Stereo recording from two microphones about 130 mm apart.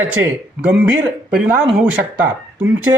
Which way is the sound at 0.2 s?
15° right (ahead or behind).